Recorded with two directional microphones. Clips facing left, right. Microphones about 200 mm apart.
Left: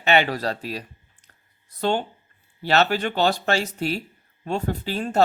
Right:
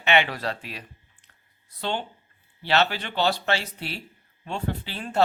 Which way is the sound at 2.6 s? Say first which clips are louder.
Left 4 dB; 45° left (ahead or behind).